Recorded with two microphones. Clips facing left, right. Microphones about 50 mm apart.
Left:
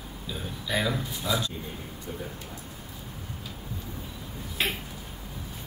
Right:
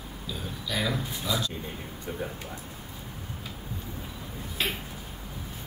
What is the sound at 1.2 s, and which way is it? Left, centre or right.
Speech, left.